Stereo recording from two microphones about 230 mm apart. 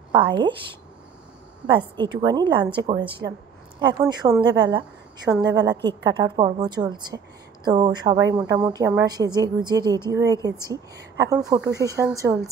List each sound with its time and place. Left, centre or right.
0.1 s a woman's voice: right
1.8 s a woman's voice: centre